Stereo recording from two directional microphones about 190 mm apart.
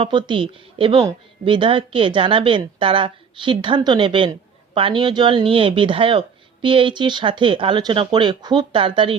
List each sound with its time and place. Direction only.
0.0 s a woman's voice: 25° right (ahead or behind)